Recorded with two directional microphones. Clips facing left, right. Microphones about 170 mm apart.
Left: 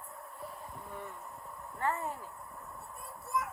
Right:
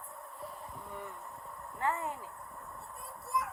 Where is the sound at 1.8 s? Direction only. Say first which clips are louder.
Even; 20° right (ahead or behind).